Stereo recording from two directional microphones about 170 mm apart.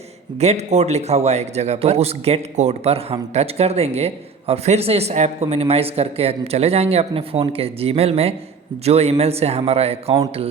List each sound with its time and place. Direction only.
0.3 s a man's voice: 40° right (ahead or behind)